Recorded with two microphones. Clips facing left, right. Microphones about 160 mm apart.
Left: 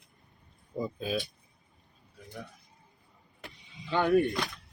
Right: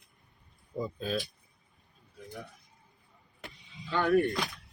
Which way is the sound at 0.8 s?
5° left (ahead or behind).